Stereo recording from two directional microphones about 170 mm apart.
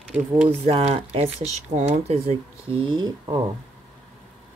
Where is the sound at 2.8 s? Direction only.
25° right (ahead or behind).